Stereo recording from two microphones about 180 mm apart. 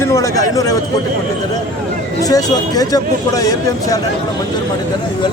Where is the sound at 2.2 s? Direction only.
20° left (ahead or behind).